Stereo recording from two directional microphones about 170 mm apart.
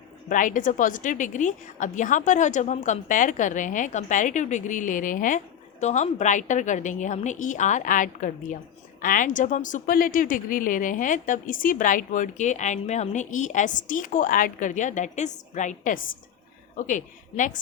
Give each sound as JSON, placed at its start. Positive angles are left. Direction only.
{"t": 0.3, "sound": "a woman's voice", "side_deg": 50}